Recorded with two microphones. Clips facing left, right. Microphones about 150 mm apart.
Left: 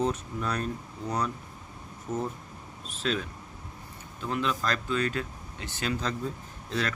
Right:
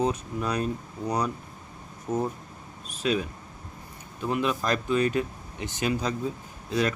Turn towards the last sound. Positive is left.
turn(degrees=-15)  # may be behind; listen again after turning